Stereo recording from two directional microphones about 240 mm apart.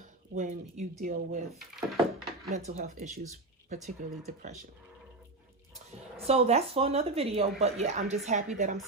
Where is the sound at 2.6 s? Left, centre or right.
Right.